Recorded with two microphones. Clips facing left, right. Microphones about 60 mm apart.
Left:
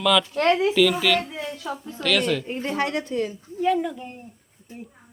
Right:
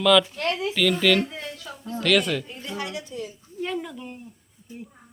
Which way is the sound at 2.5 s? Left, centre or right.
Left.